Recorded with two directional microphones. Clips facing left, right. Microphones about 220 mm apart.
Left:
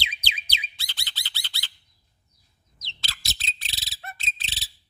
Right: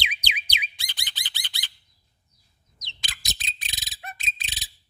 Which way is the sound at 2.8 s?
15° right (ahead or behind).